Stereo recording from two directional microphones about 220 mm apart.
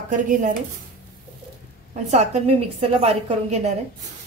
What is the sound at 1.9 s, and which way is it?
A woman's voice, 30° right (ahead or behind).